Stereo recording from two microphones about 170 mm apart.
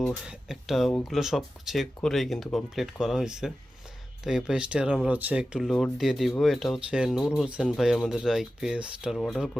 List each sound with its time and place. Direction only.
0.0 s speech: centre (ahead or behind)